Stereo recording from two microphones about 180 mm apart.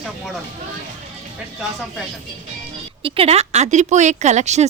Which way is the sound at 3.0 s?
30° right (ahead or behind).